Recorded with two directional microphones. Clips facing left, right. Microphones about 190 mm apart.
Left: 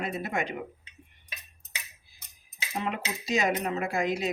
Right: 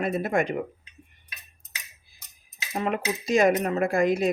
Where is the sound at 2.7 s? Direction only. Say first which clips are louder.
Right 6 dB; 50° right (ahead or behind).